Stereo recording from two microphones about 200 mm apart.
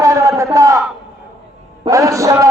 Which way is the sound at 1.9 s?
15° right (ahead or behind).